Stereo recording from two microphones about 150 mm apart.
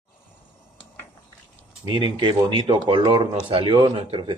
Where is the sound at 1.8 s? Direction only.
30° right (ahead or behind).